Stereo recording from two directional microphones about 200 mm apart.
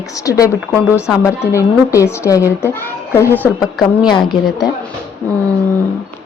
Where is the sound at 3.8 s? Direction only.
20° left (ahead or behind).